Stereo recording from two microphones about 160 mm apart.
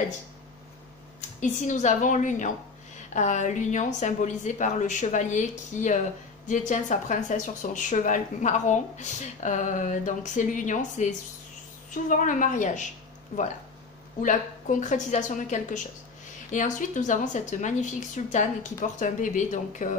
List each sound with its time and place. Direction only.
1.4 s speech: 50° left (ahead or behind)
14.2 s speech: 50° left (ahead or behind)